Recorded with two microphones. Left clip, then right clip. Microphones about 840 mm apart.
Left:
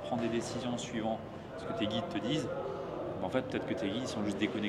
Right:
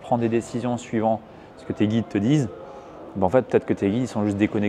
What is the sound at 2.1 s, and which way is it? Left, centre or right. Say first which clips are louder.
Speech: right 11 dB; right.